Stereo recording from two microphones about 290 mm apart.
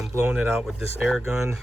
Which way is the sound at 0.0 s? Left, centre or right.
Centre.